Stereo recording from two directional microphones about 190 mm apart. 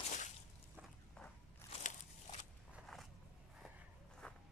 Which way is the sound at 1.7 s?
40° left (ahead or behind).